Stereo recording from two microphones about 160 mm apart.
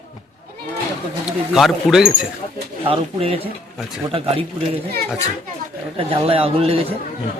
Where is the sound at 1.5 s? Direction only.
Centre (ahead or behind).